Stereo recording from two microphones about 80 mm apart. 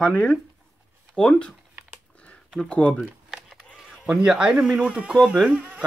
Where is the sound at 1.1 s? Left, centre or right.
Centre.